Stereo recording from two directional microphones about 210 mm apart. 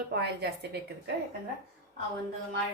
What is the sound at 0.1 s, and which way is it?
A woman's voice, 55° right (ahead or behind).